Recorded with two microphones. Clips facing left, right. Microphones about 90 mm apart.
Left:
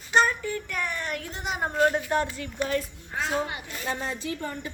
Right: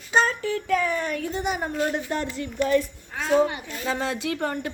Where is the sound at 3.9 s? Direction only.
90° right; by 4.6 s 70° right (ahead or behind).